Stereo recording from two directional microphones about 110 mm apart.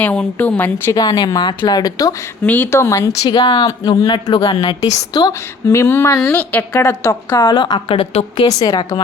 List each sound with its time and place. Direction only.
0.0 s a woman's voice: 10° left (ahead or behind)
0.9 s a woman's voice: 40° left (ahead or behind)
2.4 s a woman's voice: 15° left (ahead or behind); by 4.4 s 40° left (ahead or behind)
4.4 s a woman's voice: 60° left (ahead or behind)
4.6 s a woman's voice: 35° left (ahead or behind)
5.7 s speech: 20° left (ahead or behind)
6.3 s a woman's voice: 15° left (ahead or behind); by 8.4 s 60° left (ahead or behind)
8.4 s a woman's voice: 35° left (ahead or behind)